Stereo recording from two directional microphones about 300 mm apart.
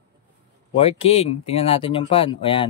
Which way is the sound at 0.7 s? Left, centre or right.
Centre.